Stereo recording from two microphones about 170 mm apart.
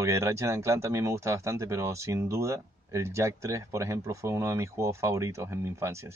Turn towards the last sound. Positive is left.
turn(degrees=-15)  # may be behind; listen again after turning